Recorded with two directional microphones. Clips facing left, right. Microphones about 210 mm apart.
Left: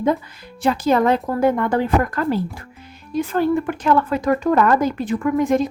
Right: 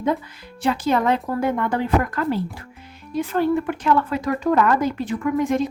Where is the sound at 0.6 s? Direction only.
40° left (ahead or behind).